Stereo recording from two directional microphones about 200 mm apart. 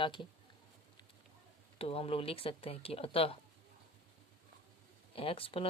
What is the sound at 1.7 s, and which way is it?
Speech, 30° left (ahead or behind).